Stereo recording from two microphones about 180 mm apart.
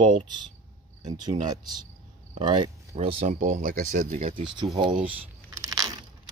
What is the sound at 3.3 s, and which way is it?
Speech, 50° right (ahead or behind).